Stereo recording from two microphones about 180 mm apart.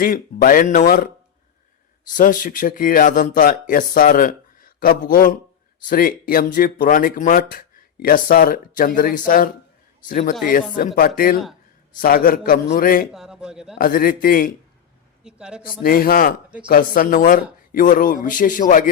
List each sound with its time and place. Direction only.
0.0 s speech: 50° left (ahead or behind)
2.1 s speech: 50° left (ahead or behind)
13.1 s a man's voice: 5° right (ahead or behind)
13.7 s speech: 55° left (ahead or behind)
15.2 s speech: 5° right (ahead or behind)
15.8 s a man's voice: 55° left (ahead or behind)